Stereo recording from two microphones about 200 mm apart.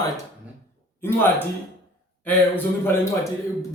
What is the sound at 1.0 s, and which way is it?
Speech, 10° left (ahead or behind).